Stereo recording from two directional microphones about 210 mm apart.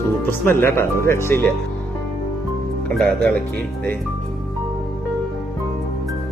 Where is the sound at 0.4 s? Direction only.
10° left (ahead or behind).